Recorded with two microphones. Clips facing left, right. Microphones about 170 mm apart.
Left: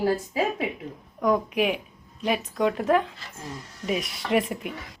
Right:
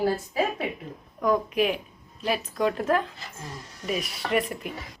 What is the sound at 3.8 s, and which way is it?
Speech, 20° left (ahead or behind).